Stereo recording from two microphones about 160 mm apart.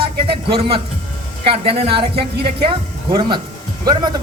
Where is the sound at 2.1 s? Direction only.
90° right.